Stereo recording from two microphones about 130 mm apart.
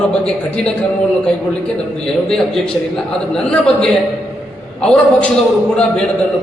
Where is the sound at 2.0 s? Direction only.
5° left (ahead or behind).